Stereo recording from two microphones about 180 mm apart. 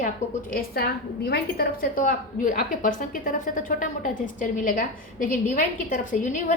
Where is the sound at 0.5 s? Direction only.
60° left (ahead or behind).